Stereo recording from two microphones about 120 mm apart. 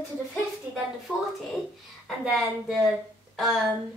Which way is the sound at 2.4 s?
Centre (ahead or behind).